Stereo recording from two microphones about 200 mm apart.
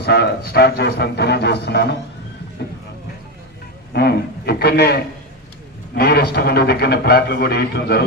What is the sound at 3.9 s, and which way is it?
A man's voice, 55° left (ahead or behind).